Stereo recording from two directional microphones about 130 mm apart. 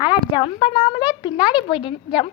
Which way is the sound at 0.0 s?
40° left (ahead or behind).